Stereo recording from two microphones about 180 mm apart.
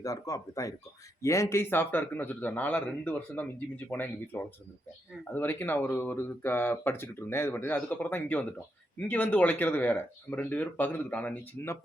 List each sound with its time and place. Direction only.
0.0 s a man's voice: 20° left (ahead or behind)